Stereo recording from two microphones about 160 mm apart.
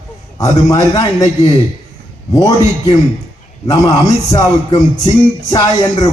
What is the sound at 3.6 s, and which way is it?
Speech, 20° left (ahead or behind).